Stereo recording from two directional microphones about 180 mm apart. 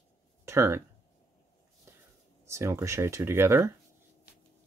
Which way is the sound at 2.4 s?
15° right (ahead or behind).